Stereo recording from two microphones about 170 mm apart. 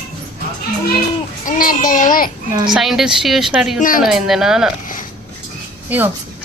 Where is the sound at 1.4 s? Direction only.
55° left (ahead or behind).